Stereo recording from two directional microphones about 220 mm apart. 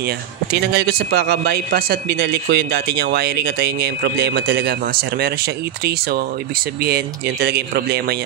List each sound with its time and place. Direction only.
0.0 s a man's voice: 45° right (ahead or behind)